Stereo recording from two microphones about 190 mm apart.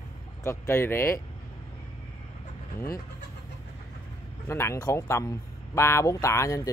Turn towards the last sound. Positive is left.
turn(degrees=15)  # may be behind; listen again after turning